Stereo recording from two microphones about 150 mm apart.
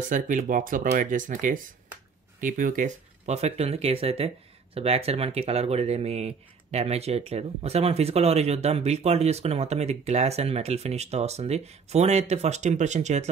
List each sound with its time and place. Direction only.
0.1 s speech: 60° right (ahead or behind)